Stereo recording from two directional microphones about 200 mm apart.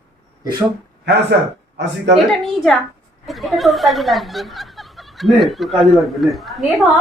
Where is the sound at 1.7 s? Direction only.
60° right (ahead or behind).